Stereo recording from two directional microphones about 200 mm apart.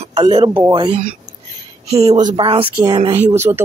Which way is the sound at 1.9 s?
20° right (ahead or behind).